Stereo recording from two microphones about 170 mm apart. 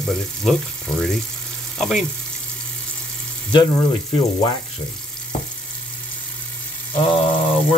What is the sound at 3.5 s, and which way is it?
Speech, 25° left (ahead or behind).